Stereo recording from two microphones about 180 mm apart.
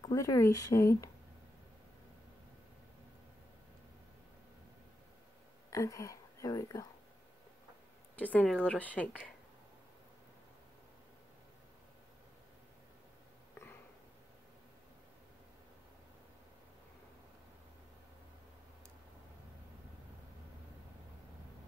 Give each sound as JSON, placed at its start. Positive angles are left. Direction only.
{"t": 0.0, "sound": "speech", "side_deg": 15}
{"t": 5.7, "sound": "speech", "side_deg": 20}
{"t": 8.2, "sound": "speech", "side_deg": 10}
{"t": 13.6, "sound": "a sound", "side_deg": 15}